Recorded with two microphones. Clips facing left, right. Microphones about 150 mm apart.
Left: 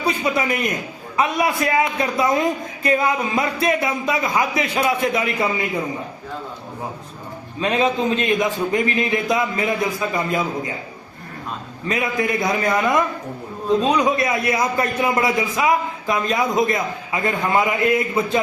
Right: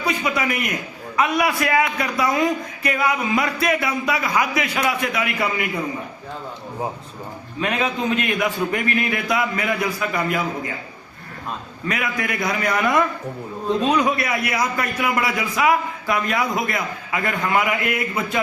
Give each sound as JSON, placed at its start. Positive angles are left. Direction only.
{"t": 0.0, "sound": "a man's voice", "side_deg": 25}
{"t": 7.6, "sound": "a man's voice", "side_deg": 25}
{"t": 11.9, "sound": "a man's voice", "side_deg": 25}